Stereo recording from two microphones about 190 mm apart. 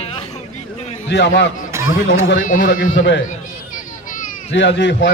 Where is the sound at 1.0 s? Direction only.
65° left (ahead or behind).